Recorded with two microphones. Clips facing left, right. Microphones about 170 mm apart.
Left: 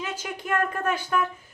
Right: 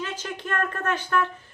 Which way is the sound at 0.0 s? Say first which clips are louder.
Even; 10° left (ahead or behind).